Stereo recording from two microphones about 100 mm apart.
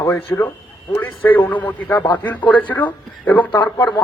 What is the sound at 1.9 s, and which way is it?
Speech, 45° left (ahead or behind).